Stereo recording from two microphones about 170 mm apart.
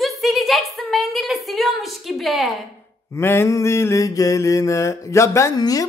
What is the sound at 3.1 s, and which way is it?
Mantra, 15° left (ahead or behind).